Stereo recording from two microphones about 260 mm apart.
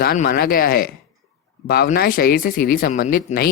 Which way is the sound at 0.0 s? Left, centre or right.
Left.